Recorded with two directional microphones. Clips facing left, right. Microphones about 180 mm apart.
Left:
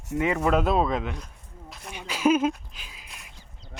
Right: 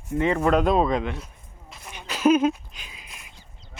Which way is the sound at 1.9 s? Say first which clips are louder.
Right 3 dB; 10° left (ahead or behind).